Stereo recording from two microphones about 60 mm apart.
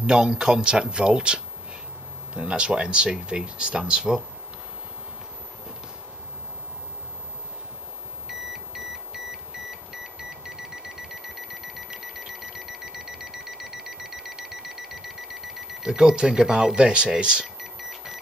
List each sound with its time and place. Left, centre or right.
0.0 s speech: centre
8.3 s beep: centre
10.1 s alarm clock: centre
17.6 s a sound: centre